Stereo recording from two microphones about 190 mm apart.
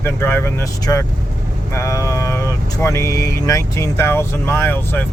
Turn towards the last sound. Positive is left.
turn(degrees=10)  # may be behind; listen again after turning